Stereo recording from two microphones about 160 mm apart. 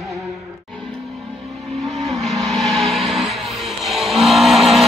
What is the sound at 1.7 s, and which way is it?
Vehicle, centre (ahead or behind).